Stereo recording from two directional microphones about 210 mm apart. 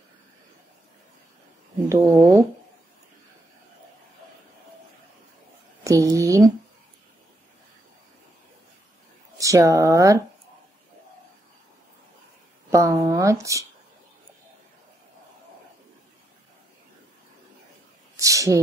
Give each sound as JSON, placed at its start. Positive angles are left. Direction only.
{"t": 1.9, "sound": "speech", "side_deg": -15}
{"t": 5.9, "sound": "a sound", "side_deg": -15}
{"t": 9.4, "sound": "speech", "side_deg": -15}
{"t": 12.7, "sound": "speech", "side_deg": -15}
{"t": 18.1, "sound": "speech", "side_deg": -15}